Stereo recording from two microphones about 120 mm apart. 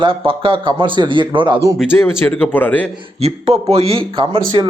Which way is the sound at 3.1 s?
60° right (ahead or behind).